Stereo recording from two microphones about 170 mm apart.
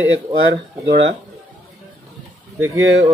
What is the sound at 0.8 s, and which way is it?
Speech, 85° right.